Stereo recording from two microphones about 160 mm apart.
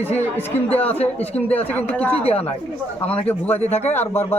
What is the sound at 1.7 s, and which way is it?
Speech, 10° left (ahead or behind).